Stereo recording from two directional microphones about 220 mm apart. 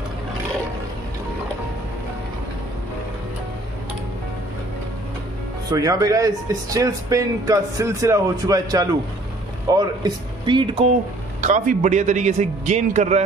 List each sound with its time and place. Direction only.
5.7 s speech: 15° right (ahead or behind)
11.4 s a man's voice: 35° right (ahead or behind)